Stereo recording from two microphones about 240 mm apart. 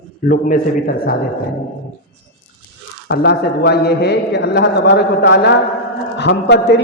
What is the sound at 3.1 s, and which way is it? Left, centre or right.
A man's voice, left.